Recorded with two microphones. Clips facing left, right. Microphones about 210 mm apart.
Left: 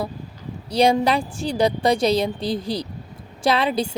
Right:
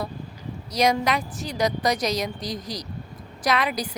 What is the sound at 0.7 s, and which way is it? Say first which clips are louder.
A woman's voice: left 5 dB; 30° left (ahead or behind).